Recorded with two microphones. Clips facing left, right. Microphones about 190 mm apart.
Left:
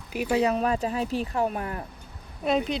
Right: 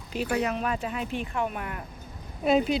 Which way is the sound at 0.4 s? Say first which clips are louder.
Left 5 dB; 35° left (ahead or behind).